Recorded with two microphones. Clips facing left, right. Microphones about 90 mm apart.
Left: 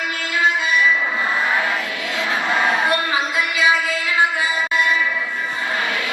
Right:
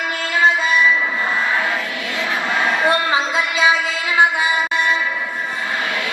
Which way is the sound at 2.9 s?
25° right (ahead or behind).